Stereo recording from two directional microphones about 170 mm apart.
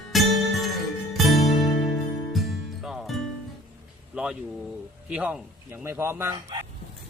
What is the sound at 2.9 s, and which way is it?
Music, centre (ahead or behind).